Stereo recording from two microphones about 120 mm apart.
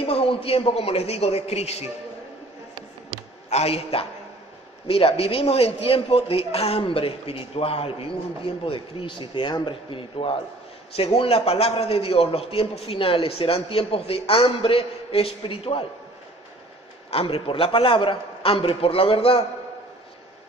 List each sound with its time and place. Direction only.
0.0 s a man's voice: 55° left (ahead or behind)
3.4 s a man's voice: 60° left (ahead or behind)
17.1 s a man's voice: 55° left (ahead or behind)